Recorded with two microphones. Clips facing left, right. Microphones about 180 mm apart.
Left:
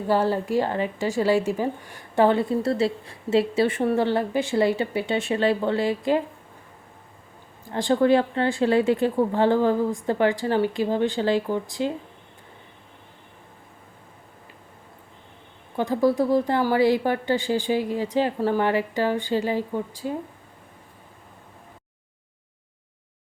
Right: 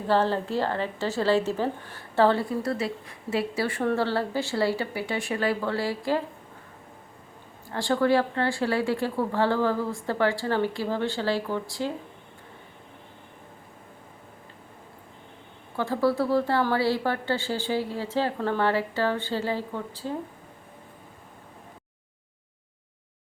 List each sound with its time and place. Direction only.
0.1 s a woman's voice: 10° left (ahead or behind)
7.7 s speech: 20° left (ahead or behind)
15.7 s a woman's voice: 15° left (ahead or behind)